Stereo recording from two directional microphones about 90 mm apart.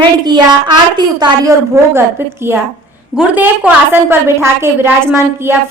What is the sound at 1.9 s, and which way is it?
A woman's voice, 25° right (ahead or behind).